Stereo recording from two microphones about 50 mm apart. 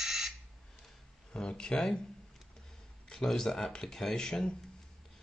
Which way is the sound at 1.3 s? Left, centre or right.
Centre.